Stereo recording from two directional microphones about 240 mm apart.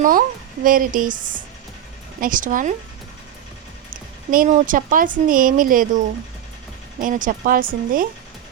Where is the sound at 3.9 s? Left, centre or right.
Right.